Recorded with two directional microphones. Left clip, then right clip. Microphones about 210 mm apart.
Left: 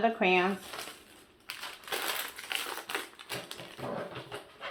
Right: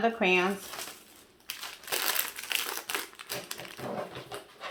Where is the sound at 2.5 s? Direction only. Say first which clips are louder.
Right 2 dB; 40° right (ahead or behind).